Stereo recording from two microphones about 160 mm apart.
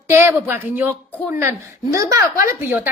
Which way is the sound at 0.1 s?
15° right (ahead or behind).